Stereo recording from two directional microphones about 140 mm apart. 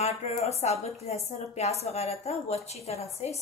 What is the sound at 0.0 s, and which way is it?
A woman's voice, 50° left (ahead or behind).